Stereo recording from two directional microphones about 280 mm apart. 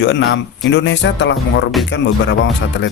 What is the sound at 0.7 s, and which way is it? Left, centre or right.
Speech, left.